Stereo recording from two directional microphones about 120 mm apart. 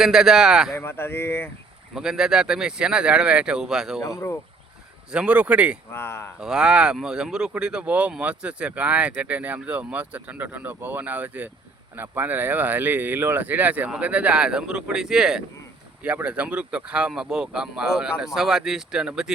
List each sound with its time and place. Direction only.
0.0 s speech: 5° right (ahead or behind)
0.8 s speech: 20° left (ahead or behind)
2.0 s speech: 5° right (ahead or behind)
4.0 s speech: 30° left (ahead or behind)
5.1 s speech: 10° right (ahead or behind)
5.9 s speech: 20° left (ahead or behind)
6.4 s speech: 5° right (ahead or behind)